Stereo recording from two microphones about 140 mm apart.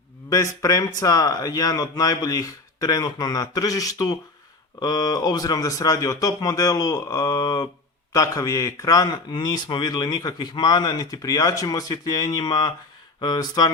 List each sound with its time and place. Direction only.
0.3 s speech: 25° left (ahead or behind)